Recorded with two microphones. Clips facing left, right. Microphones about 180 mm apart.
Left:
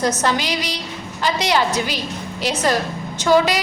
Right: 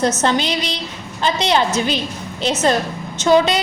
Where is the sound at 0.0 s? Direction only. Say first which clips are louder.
Right 2 dB; 25° right (ahead or behind).